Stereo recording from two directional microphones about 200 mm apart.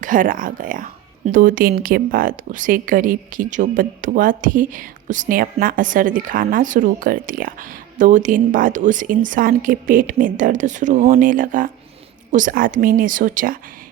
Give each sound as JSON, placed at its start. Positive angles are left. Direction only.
{"t": 0.0, "sound": "a woman's voice", "side_deg": -40}